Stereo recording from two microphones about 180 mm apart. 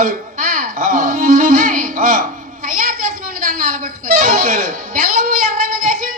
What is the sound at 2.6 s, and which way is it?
Music, 50° right (ahead or behind).